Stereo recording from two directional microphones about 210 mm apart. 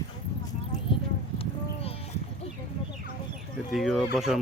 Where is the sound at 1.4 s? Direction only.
25° left (ahead or behind).